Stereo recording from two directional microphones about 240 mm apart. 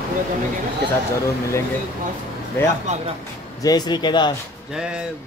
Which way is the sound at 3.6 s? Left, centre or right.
Centre.